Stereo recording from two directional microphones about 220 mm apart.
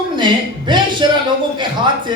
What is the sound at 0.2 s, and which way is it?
A man's voice, 20° right (ahead or behind).